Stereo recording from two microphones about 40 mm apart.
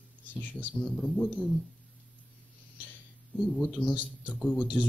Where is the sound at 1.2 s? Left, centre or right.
Left.